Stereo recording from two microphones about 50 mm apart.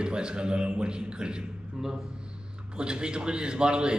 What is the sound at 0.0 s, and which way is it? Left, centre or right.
A man's voice, centre.